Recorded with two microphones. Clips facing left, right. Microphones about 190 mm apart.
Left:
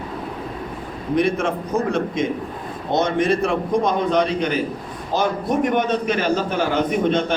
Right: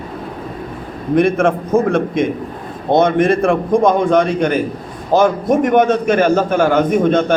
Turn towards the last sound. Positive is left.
turn(degrees=-45)  # may be behind; listen again after turning